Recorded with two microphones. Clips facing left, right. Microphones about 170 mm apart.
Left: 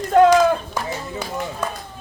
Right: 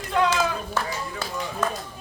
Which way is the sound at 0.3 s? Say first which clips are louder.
Left 10 dB; 15° left (ahead or behind).